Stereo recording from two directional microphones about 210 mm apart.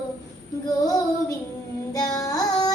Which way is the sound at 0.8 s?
15° left (ahead or behind).